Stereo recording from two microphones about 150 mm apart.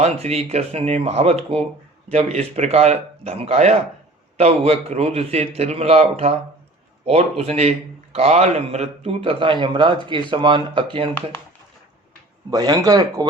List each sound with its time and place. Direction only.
0.0 s a man's voice: 45° right (ahead or behind)
12.5 s speech: 25° right (ahead or behind)